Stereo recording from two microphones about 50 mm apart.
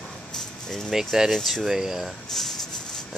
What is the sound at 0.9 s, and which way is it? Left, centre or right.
Speech, centre.